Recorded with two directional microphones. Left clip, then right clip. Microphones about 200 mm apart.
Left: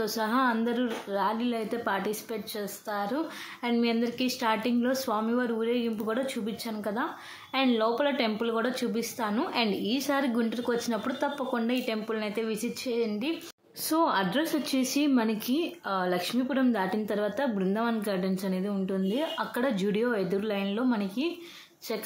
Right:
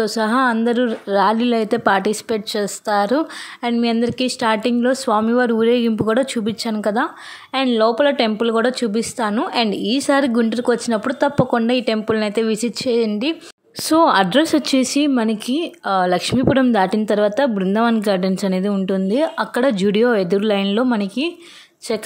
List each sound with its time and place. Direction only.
0.0 s a woman's voice: 40° right (ahead or behind)